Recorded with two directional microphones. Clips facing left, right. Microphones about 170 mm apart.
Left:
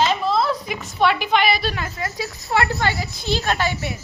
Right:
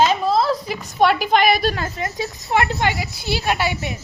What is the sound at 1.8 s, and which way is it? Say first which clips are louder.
A woman's voice: right 2 dB; 20° right (ahead or behind).